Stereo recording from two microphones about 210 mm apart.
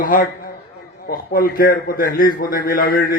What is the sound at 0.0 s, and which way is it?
A man's voice, 40° left (ahead or behind).